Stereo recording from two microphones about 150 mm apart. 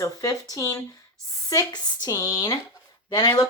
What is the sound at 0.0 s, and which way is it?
Speech, 20° left (ahead or behind).